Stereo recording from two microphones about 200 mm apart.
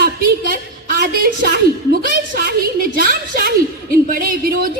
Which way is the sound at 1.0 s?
50° right (ahead or behind).